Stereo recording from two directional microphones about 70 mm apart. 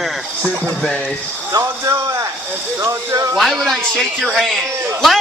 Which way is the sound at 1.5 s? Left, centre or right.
Right.